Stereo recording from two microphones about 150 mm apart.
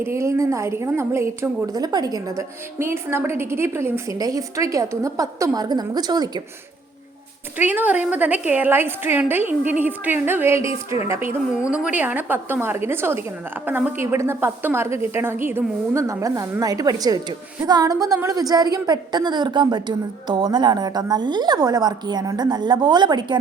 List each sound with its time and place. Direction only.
0.0 s a woman's voice: 20° right (ahead or behind)
7.6 s a woman's voice: 10° right (ahead or behind)
10.7 s a woman's voice: 40° left (ahead or behind)
11.1 s a woman's voice: 15° right (ahead or behind); by 23.4 s 30° right (ahead or behind)